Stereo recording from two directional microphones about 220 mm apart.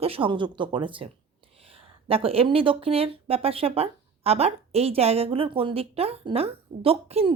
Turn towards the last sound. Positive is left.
turn(degrees=-25)  # may be behind; listen again after turning